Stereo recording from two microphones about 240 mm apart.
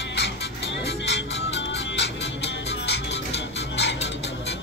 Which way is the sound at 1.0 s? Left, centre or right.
Left.